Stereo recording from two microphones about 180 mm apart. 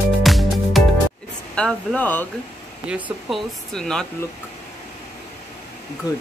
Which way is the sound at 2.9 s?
5° right (ahead or behind).